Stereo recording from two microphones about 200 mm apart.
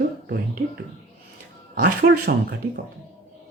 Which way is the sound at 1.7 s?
55° right (ahead or behind).